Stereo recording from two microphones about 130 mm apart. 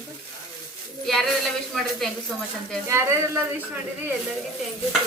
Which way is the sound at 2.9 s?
20° right (ahead or behind).